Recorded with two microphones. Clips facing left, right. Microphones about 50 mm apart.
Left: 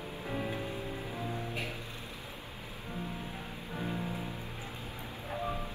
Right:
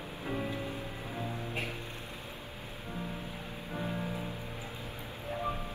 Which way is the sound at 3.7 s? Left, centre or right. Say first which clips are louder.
Right 1 dB; centre.